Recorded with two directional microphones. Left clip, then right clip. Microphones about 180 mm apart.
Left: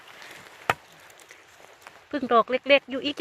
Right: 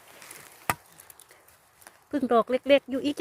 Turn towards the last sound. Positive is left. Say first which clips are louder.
# left 1 dB
turn(degrees=-25)  # may be behind; listen again after turning